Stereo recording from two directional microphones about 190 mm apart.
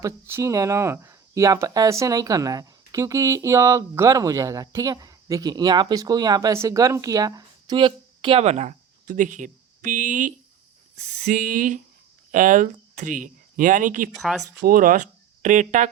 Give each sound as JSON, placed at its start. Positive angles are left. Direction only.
{"t": 0.0, "sound": "speech", "side_deg": -15}
{"t": 14.1, "sound": "speech", "side_deg": 0}
{"t": 14.7, "sound": "speech", "side_deg": -45}